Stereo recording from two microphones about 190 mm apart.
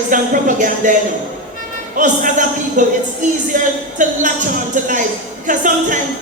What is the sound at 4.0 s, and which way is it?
Speech, 40° right (ahead or behind).